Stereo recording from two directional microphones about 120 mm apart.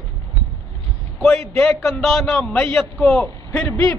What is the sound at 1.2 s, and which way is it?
A man's voice, 20° left (ahead or behind).